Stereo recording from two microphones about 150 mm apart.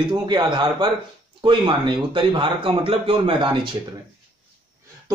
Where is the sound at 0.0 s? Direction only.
30° right (ahead or behind).